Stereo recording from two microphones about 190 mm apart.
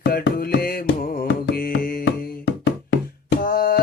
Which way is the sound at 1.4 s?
55° left (ahead or behind).